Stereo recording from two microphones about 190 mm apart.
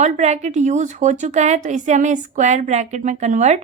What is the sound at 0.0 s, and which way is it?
A woman's voice, 35° right (ahead or behind).